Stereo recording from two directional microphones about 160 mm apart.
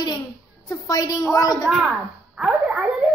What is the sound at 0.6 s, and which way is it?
A woman's voice, 20° left (ahead or behind).